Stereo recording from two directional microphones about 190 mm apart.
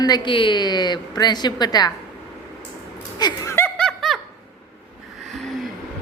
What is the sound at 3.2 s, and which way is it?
Laughter, 20° left (ahead or behind).